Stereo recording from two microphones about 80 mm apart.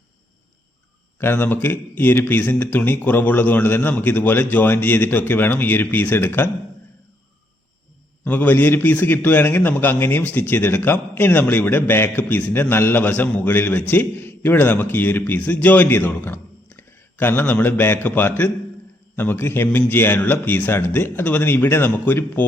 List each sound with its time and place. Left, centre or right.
1.2 s a man's voice: left
8.2 s a man's voice: left
19.6 s speech: centre
19.9 s a man's voice: left